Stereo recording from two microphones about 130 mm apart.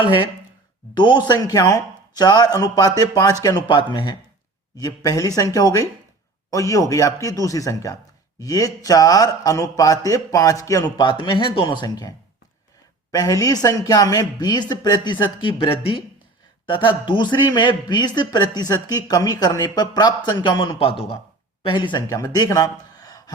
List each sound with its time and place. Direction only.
0.9 s a man's voice: 35° left (ahead or behind)
4.8 s a man's voice: 25° left (ahead or behind)